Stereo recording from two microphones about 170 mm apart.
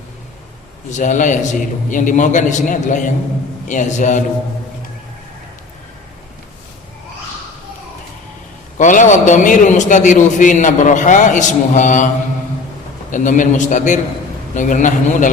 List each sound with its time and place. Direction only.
0.9 s a man's voice: 45° left (ahead or behind)
8.8 s a man's voice: 45° left (ahead or behind)